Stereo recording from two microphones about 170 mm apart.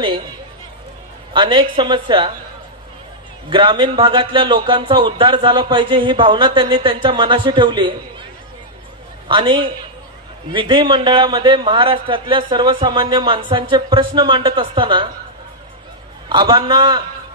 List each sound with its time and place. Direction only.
1.3 s a man's voice: 30° right (ahead or behind)
3.4 s a man's voice: 30° right (ahead or behind)
9.3 s a man's voice: 30° right (ahead or behind)
16.3 s a man's voice: 25° right (ahead or behind)